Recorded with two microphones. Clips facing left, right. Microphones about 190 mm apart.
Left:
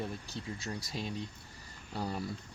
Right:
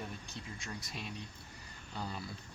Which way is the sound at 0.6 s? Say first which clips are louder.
Left 5 dB; 35° left (ahead or behind).